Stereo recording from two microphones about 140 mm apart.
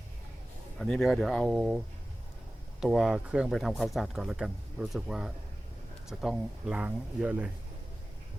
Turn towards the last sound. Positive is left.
turn(degrees=-10)  # may be behind; listen again after turning